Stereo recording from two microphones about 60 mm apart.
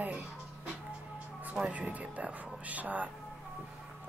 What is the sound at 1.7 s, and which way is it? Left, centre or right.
Speech, right.